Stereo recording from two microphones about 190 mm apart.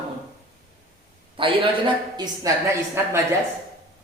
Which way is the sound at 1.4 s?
25° right (ahead or behind).